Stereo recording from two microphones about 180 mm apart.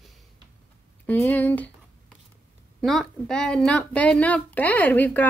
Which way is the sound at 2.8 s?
5° left (ahead or behind).